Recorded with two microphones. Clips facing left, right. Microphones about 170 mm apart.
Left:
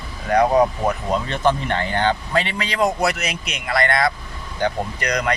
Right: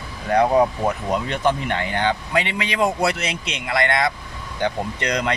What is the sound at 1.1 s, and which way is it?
Speech, 15° right (ahead or behind).